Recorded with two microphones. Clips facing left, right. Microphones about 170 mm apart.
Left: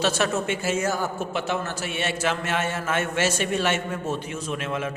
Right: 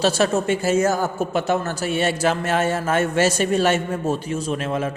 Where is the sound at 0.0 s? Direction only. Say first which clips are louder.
Right 5 dB; 35° right (ahead or behind).